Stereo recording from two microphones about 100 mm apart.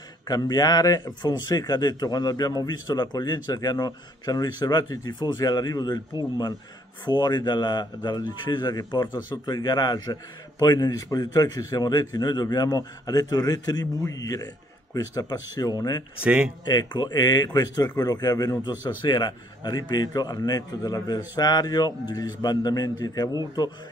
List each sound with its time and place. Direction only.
0.3 s a man's voice: 40° left (ahead or behind)
16.2 s speech: 10° right (ahead or behind)
16.6 s a man's voice: 45° left (ahead or behind)